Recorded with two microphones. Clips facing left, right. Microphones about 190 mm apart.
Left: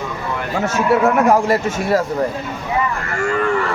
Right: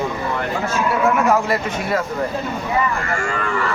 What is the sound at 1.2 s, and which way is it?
Speech, 40° left (ahead or behind).